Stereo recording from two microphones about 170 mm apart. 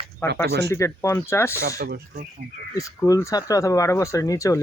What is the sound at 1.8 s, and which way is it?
Speech, 65° right (ahead or behind).